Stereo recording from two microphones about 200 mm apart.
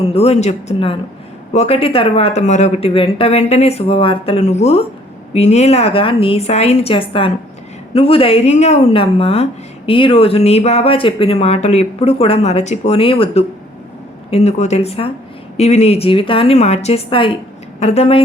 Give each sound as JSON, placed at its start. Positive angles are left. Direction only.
{"t": 0.1, "sound": "a woman's voice", "side_deg": 30}